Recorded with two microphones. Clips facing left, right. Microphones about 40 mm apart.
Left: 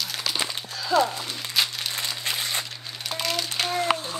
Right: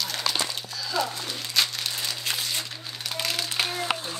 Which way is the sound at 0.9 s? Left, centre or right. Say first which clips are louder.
Left 7 dB; left.